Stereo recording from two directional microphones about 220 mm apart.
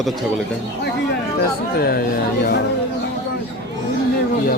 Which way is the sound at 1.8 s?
45° left (ahead or behind).